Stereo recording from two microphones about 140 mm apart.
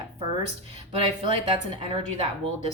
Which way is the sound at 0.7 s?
40° right (ahead or behind).